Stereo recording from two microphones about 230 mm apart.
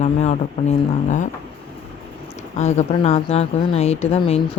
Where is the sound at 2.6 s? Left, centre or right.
Left.